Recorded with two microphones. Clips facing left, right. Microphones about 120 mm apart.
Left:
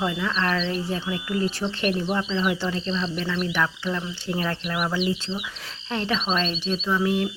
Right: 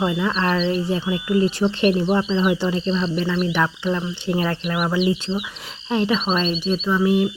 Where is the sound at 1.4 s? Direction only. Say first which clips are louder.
Right 7 dB; 20° right (ahead or behind).